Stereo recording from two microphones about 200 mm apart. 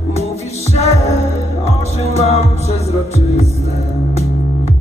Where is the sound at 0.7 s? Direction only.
30° left (ahead or behind).